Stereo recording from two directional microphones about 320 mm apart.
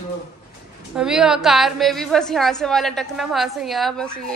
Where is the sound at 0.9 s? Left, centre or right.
Centre.